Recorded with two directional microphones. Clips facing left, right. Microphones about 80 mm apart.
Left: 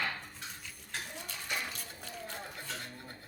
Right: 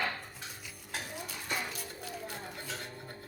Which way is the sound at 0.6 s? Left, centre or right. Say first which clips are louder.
Right 3 dB; centre.